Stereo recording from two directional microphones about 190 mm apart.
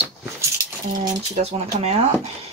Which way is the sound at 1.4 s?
35° right (ahead or behind).